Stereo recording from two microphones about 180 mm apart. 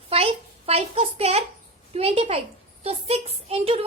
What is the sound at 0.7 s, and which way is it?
A woman's voice, 35° right (ahead or behind).